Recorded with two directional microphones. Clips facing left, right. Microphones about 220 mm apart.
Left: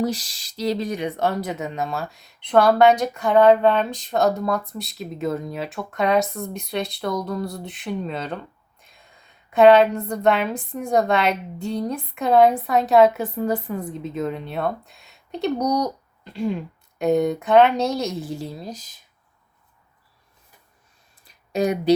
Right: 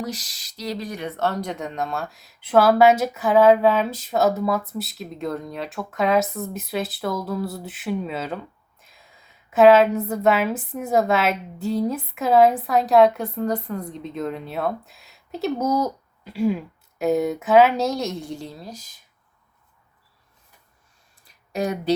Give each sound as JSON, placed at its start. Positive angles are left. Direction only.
{"t": 0.0, "sound": "speech", "side_deg": 30}
{"t": 18.6, "sound": "speech", "side_deg": 20}
{"t": 21.5, "sound": "speech", "side_deg": 15}